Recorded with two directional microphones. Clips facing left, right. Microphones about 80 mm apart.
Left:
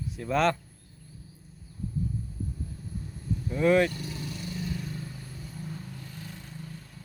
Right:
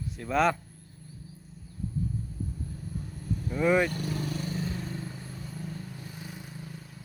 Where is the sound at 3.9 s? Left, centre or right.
Right.